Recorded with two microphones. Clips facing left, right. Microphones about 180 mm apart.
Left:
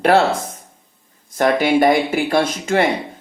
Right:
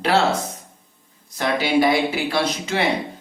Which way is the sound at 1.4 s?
50° left (ahead or behind).